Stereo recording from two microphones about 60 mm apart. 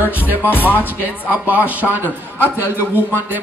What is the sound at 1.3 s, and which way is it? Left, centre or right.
Speech, right.